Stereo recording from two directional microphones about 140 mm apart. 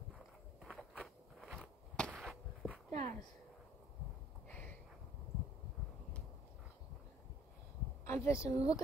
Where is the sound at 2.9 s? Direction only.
55° right (ahead or behind).